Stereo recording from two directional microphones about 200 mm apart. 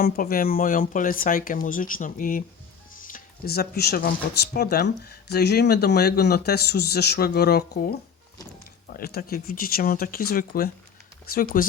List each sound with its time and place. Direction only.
0.0 s speech: 45° left (ahead or behind)